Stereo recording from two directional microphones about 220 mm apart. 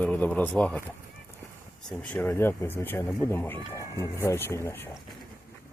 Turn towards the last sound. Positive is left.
turn(degrees=10)  # may be behind; listen again after turning